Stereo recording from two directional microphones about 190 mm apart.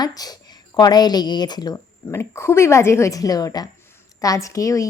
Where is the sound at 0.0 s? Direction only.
20° left (ahead or behind).